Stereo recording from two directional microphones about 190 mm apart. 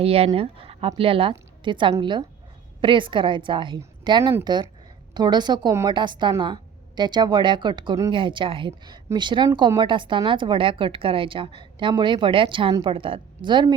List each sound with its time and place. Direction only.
0.0 s a woman's voice: 30° right (ahead or behind)